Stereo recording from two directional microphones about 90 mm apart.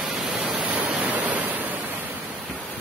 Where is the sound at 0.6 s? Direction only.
15° right (ahead or behind).